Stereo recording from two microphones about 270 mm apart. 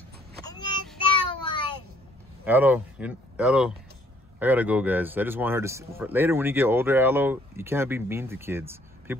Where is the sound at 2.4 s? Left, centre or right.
Centre.